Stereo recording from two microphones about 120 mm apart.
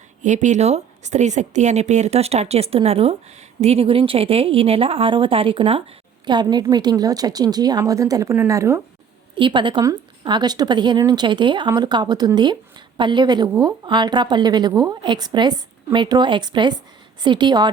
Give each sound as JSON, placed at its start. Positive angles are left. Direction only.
{"t": 0.2, "sound": "a woman's voice", "side_deg": -90}
{"t": 6.2, "sound": "a woman's voice", "side_deg": -40}
{"t": 9.3, "sound": "a woman's voice", "side_deg": -45}